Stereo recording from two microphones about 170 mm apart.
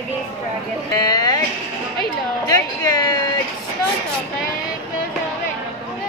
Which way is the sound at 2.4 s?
20° left (ahead or behind).